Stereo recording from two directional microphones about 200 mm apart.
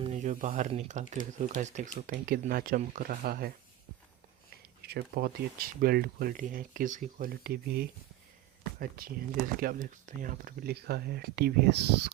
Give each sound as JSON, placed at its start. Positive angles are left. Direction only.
{"t": 0.0, "sound": "speech", "side_deg": -35}
{"t": 4.8, "sound": "speech", "side_deg": -50}
{"t": 9.0, "sound": "speech", "side_deg": -50}